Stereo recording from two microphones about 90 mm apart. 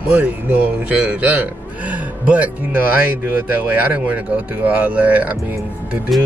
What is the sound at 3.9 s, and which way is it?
Speech, 15° right (ahead or behind).